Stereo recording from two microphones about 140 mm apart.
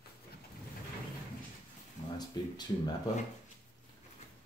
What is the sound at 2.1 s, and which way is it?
Speech, 30° left (ahead or behind).